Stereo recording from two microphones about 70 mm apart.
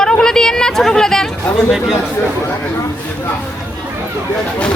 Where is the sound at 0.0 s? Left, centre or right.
Centre.